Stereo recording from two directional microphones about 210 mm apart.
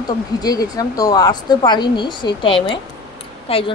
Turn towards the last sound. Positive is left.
turn(degrees=25)  # may be behind; listen again after turning